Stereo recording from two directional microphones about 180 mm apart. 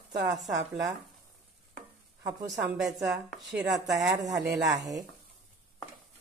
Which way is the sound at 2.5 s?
Centre (ahead or behind).